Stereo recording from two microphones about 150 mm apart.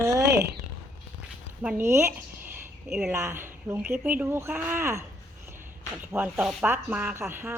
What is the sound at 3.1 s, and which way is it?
A woman's voice, 15° right (ahead or behind).